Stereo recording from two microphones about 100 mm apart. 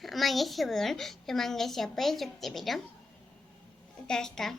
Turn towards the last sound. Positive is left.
turn(degrees=5)  # may be behind; listen again after turning